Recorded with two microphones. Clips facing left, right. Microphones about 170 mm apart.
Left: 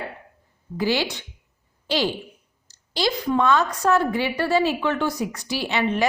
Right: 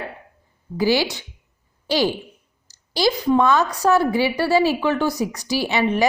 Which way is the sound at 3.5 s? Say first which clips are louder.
Right 2 dB; 35° right (ahead or behind).